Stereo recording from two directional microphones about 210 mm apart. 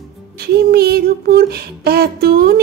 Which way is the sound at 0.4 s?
45° right (ahead or behind).